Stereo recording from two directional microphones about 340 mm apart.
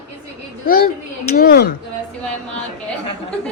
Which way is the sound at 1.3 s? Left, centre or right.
Left.